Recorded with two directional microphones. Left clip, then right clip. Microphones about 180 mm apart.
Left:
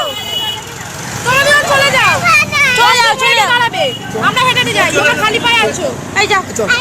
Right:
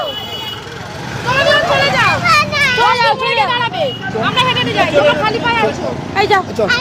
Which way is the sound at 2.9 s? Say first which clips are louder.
Left 3 dB; centre (ahead or behind).